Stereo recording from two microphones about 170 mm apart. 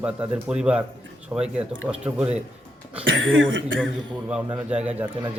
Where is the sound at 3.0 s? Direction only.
90° right.